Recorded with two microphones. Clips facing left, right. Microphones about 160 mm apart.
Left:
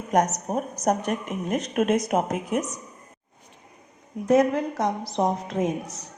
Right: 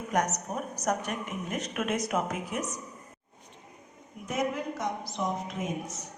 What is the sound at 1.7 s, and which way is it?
Speech, 40° left (ahead or behind).